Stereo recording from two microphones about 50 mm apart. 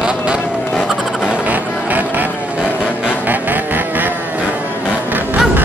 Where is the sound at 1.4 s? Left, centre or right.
Right.